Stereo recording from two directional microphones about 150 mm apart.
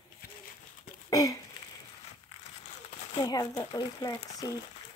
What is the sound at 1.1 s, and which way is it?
Speech, 20° left (ahead or behind).